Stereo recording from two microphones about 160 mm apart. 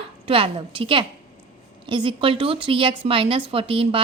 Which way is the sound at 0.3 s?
35° right (ahead or behind).